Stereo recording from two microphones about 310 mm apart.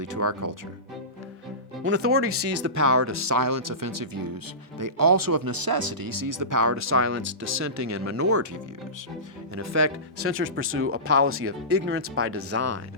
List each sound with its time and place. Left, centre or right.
0.0 s speech: right
1.8 s speech: right
8.3 s speech: right
10.2 s speech: right